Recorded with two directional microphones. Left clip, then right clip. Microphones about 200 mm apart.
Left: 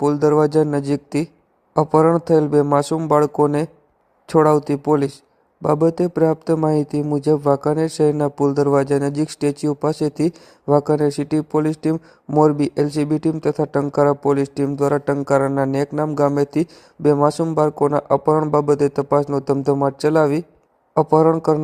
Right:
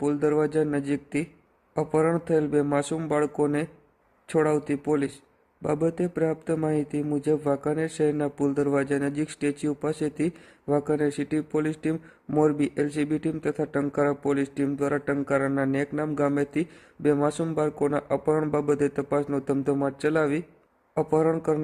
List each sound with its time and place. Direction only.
0.0 s speech: 20° left (ahead or behind)